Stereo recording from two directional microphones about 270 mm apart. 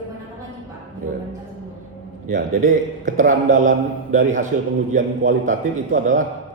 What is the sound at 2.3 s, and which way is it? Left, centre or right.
A man's voice, right.